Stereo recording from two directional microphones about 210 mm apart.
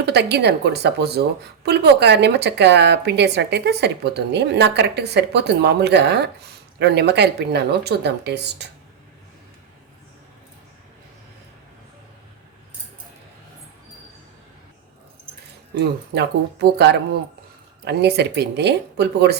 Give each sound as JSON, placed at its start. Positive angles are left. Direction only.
{"t": 0.0, "sound": "a woman's voice", "side_deg": -55}
{"t": 15.8, "sound": "a woman's voice", "side_deg": -50}